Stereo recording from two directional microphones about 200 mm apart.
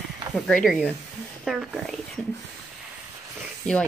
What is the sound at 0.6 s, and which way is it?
Speech, centre (ahead or behind).